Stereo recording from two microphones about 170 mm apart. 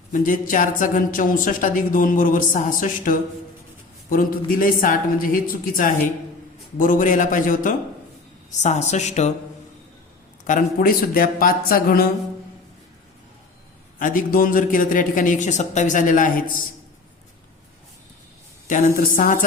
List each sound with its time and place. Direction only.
0.1 s a woman's voice: 50° left (ahead or behind)
10.4 s a woman's voice: 55° left (ahead or behind)
14.0 s a woman's voice: 55° left (ahead or behind)
18.7 s a woman's voice: 55° left (ahead or behind)